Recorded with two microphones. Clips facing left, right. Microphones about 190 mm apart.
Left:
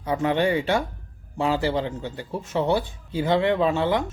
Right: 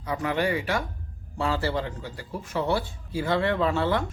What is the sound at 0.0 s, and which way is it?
A man's voice, 25° left (ahead or behind).